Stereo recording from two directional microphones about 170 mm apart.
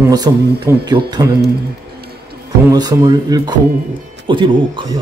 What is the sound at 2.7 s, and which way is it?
Speech, 20° right (ahead or behind).